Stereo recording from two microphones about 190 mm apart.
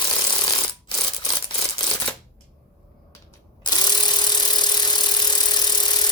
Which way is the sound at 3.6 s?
20° left (ahead or behind).